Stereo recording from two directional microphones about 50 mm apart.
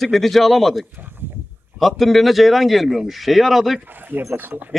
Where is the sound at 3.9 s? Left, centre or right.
Right.